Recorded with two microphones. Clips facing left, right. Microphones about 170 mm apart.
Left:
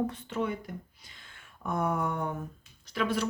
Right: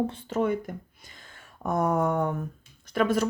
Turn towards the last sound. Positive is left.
turn(degrees=-50)  # may be behind; listen again after turning